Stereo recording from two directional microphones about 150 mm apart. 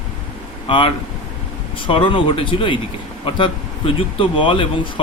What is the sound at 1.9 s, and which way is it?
Speech, 35° left (ahead or behind).